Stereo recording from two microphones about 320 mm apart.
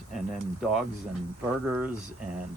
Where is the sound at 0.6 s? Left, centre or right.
Centre.